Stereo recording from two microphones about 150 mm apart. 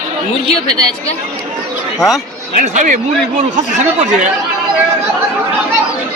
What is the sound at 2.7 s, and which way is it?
Speech, 55° right (ahead or behind).